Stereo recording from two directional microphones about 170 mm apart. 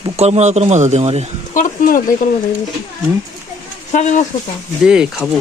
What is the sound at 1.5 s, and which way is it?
Speech, 50° left (ahead or behind).